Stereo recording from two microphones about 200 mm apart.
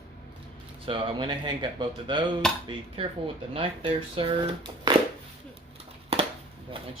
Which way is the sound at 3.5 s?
25° right (ahead or behind).